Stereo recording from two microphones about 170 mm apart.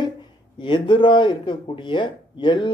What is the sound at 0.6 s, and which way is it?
A man's voice, 30° left (ahead or behind).